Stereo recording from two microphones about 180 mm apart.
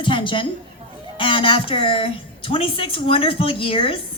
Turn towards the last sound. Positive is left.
turn(degrees=30)  # may be behind; listen again after turning